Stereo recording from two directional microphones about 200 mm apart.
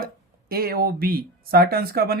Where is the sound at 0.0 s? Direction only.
45° right (ahead or behind).